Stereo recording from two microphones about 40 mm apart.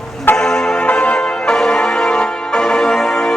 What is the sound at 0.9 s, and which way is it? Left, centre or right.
Change ringing, left.